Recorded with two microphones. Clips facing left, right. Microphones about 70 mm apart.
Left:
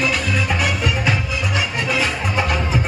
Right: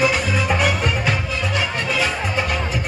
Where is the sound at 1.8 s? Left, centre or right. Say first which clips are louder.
Left 1 dB; centre.